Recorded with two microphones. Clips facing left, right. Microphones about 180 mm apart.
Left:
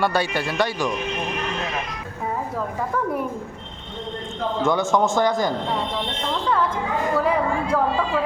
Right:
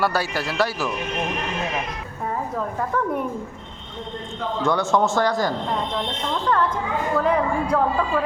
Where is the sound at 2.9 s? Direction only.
5° left (ahead or behind).